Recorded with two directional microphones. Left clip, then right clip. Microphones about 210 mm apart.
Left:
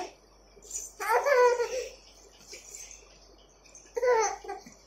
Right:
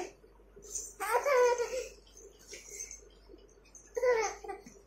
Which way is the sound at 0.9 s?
5° right (ahead or behind).